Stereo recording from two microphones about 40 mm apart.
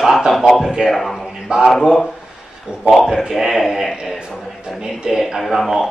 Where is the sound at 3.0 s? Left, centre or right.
Centre.